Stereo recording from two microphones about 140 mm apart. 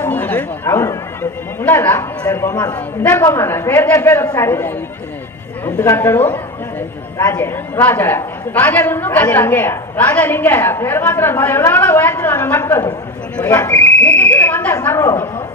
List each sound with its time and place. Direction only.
0.0 s a woman's voice: 10° left (ahead or behind)
5.8 s a woman's voice: 15° left (ahead or behind)